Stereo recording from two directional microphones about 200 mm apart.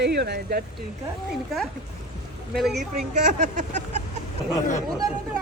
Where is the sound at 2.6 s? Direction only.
Centre (ahead or behind).